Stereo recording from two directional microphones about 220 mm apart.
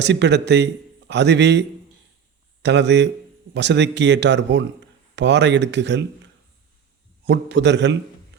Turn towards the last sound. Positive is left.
turn(degrees=-55)  # may be behind; listen again after turning